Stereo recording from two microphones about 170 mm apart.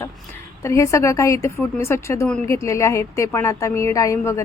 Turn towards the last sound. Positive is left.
turn(degrees=20)  # may be behind; listen again after turning